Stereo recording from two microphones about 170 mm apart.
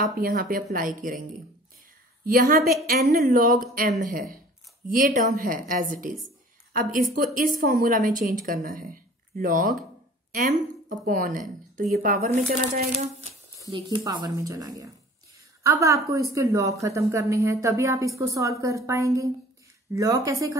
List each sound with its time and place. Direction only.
0.2 s speech: 60° right (ahead or behind)
2.2 s a woman's voice: 55° right (ahead or behind)
12.9 s speech: 40° right (ahead or behind)
13.7 s a woman's voice: 25° right (ahead or behind)